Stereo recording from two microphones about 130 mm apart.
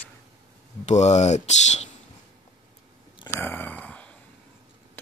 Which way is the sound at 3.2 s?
15° left (ahead or behind).